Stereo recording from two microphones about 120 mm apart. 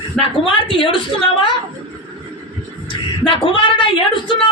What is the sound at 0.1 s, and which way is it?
Speech, 5° left (ahead or behind).